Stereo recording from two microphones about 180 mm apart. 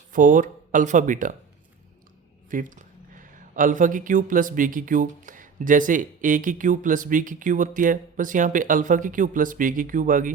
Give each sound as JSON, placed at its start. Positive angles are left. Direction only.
{"t": 0.1, "sound": "speech", "side_deg": -45}
{"t": 2.5, "sound": "speech", "side_deg": -50}